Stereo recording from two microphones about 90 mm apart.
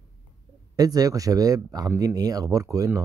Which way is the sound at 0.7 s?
45° right (ahead or behind).